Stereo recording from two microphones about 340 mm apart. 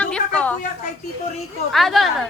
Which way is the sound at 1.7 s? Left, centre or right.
Centre.